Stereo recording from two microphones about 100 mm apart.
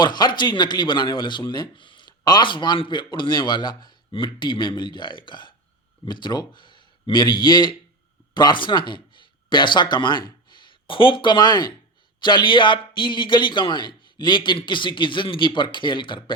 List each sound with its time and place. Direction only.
0.0 s a man's voice: 45° left (ahead or behind)